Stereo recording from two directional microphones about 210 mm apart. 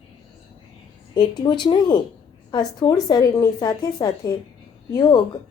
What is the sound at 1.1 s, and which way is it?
Speech, 20° left (ahead or behind).